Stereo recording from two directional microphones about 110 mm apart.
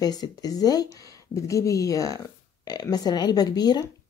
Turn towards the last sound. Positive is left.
turn(degrees=40)  # may be behind; listen again after turning